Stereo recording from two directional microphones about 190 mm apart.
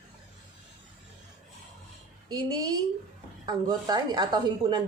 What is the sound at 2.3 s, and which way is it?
A woman's voice, 20° right (ahead or behind).